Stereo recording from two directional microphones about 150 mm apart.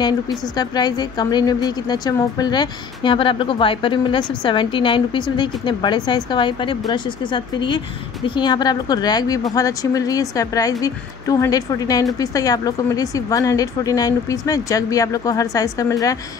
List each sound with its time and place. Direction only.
0.6 s a woman's voice: 30° left (ahead or behind)